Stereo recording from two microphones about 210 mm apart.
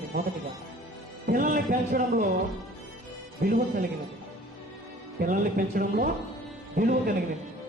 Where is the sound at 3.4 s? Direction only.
45° right (ahead or behind).